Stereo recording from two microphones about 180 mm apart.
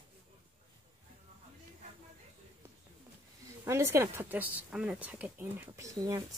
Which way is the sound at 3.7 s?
15° right (ahead or behind).